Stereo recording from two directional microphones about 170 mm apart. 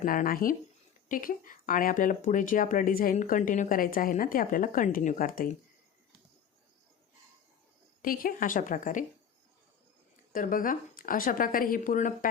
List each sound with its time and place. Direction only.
0.0 s speech: 55° left (ahead or behind)
8.0 s speech: 55° left (ahead or behind)
10.3 s speech: 55° left (ahead or behind)